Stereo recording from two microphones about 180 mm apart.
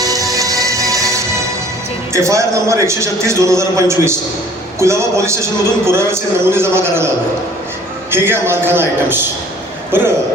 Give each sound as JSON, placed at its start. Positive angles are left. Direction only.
{"t": 0.0, "sound": "music", "side_deg": -20}
{"t": 2.1, "sound": "a man's voice", "side_deg": -15}
{"t": 8.1, "sound": "a man's voice", "side_deg": -10}